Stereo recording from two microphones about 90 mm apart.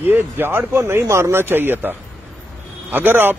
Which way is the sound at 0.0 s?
20° right (ahead or behind).